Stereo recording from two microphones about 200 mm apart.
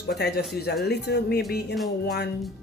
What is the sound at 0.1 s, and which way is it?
A woman's voice, 55° left (ahead or behind).